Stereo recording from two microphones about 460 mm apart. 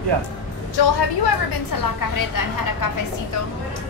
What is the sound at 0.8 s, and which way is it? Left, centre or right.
A woman's voice, left.